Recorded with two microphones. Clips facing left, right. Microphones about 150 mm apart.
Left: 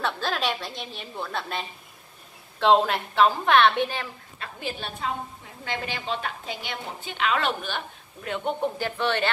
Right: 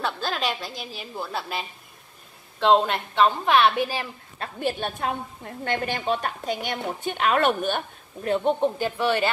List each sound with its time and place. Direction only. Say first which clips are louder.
0.0 s a woman's voice: even; centre (ahead or behind)
4.4 s a woman's voice: right 7 dB; 50° right (ahead or behind)
8.3 s speech: right 6 dB; 35° right (ahead or behind)
8.7 s speech: right 3 dB; 10° right (ahead or behind)